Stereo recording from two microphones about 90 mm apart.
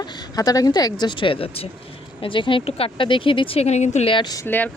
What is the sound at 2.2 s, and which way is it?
Speech, 70° left (ahead or behind).